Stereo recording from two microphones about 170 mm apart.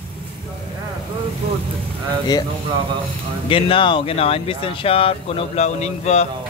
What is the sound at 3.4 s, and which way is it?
Speech, 30° left (ahead or behind).